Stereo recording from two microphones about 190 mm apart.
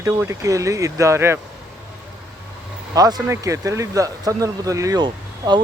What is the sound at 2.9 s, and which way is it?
Speech, 20° right (ahead or behind).